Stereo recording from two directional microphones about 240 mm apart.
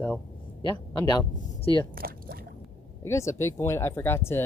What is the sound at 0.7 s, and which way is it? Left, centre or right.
Speech, centre.